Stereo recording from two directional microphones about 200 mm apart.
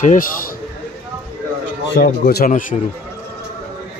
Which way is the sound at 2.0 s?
45° left (ahead or behind).